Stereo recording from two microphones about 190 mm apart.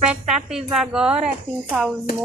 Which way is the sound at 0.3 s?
5° right (ahead or behind).